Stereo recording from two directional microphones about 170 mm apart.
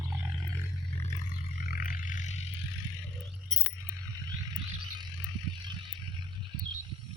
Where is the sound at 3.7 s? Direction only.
20° right (ahead or behind).